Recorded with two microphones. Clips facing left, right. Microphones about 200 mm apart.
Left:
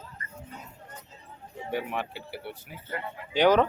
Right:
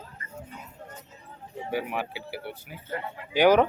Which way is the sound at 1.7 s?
5° right (ahead or behind).